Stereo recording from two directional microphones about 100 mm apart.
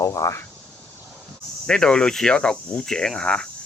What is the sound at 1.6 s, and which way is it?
Speech, 5° left (ahead or behind).